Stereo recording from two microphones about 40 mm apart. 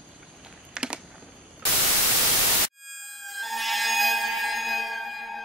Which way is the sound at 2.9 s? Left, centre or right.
Centre.